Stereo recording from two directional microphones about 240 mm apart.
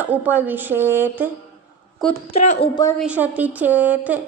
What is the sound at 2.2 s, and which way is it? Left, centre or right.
Speech, left.